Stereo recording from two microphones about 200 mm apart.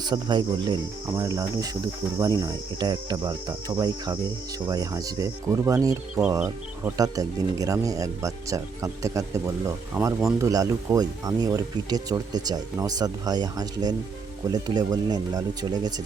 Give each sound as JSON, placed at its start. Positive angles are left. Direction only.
{"t": 0.0, "sound": "speech", "side_deg": -20}
{"t": 10.0, "sound": "speech", "side_deg": -5}
{"t": 10.3, "sound": "speech", "side_deg": -15}